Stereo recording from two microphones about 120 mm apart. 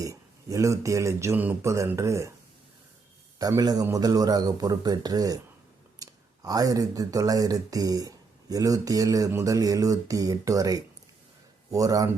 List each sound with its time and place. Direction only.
0.0 s speech: 25° right (ahead or behind)
3.3 s speech: 30° right (ahead or behind)